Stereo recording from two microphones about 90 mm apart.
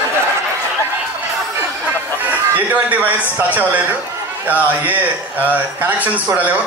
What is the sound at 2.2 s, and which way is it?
Chicken, 20° right (ahead or behind).